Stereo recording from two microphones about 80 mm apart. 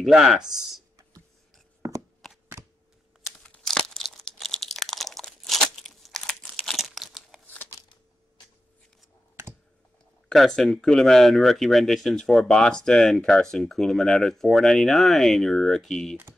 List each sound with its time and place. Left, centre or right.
0.0 s speech: centre
1.8 s a sound: right
2.2 s chopping: centre
3.3 s crunch: centre
10.3 s speech: centre